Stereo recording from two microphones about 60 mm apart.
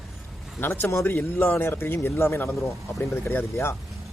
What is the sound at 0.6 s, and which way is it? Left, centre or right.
Speech, left.